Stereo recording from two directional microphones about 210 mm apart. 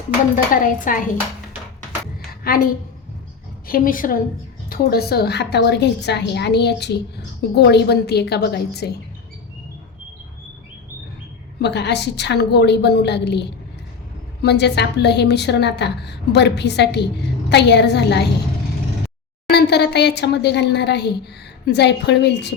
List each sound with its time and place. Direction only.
0.3 s speech: 40° left (ahead or behind)
2.5 s a woman's voice: 45° left (ahead or behind)
3.7 s a woman's voice: 40° left (ahead or behind)
11.6 s a woman's voice: 55° left (ahead or behind)
14.4 s a woman's voice: 55° left (ahead or behind)
19.5 s a woman's voice: 50° left (ahead or behind)